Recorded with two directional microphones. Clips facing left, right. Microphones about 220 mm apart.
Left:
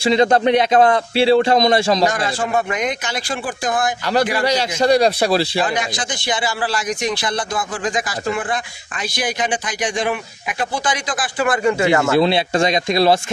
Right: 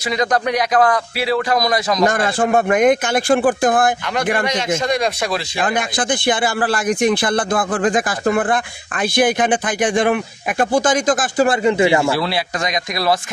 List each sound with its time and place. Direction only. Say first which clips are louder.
0.0 s speech: left 5 dB; 30° left (ahead or behind)
2.0 s a man's voice: right 3 dB; 50° right (ahead or behind)
4.5 s a man's voice: left 3 dB; 35° left (ahead or behind)
5.8 s a man's voice: right 4 dB; 55° right (ahead or behind)
11.4 s speech: right 1 dB; 20° right (ahead or behind)
12.1 s speech: left 5 dB; 20° left (ahead or behind)